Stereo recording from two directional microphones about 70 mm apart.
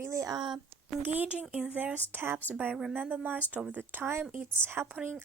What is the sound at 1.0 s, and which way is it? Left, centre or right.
Speech, right.